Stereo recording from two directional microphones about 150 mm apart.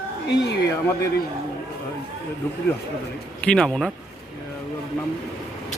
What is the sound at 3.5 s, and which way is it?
Speech, 5° left (ahead or behind).